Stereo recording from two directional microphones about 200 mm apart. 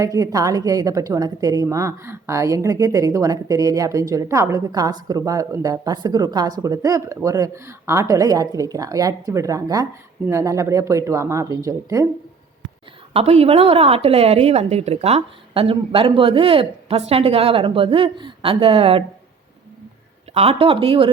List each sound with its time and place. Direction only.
0.0 s a woman's voice: 15° right (ahead or behind)
13.1 s a woman's voice: 30° right (ahead or behind)
20.3 s a woman's voice: 30° right (ahead or behind)